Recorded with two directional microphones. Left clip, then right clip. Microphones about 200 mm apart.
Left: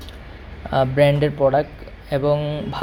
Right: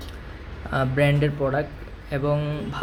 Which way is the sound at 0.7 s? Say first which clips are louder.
Left 6 dB; 15° left (ahead or behind).